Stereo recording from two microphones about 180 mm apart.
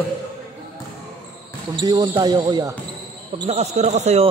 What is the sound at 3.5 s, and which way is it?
Speech, 35° right (ahead or behind).